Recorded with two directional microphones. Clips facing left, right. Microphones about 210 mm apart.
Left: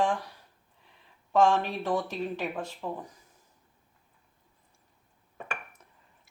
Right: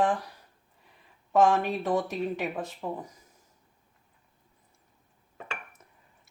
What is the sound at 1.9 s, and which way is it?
Speech, 20° right (ahead or behind).